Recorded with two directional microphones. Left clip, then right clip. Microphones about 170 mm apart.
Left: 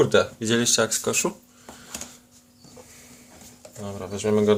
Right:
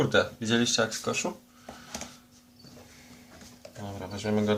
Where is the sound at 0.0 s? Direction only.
55° left (ahead or behind).